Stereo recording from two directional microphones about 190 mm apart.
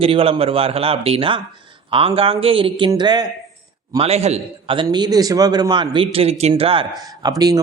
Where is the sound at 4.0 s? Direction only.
35° right (ahead or behind).